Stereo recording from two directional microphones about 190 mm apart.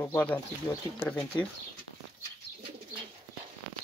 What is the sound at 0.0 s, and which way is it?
Speech, 10° left (ahead or behind).